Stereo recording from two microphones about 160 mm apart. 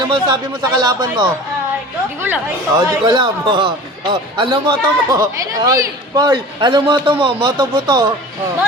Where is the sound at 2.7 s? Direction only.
25° right (ahead or behind).